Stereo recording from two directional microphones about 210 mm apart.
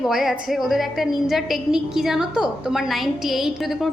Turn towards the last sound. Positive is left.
turn(degrees=0)  # may be behind; listen again after turning